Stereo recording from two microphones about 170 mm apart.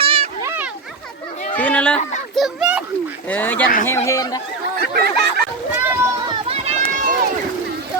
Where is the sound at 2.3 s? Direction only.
Centre (ahead or behind).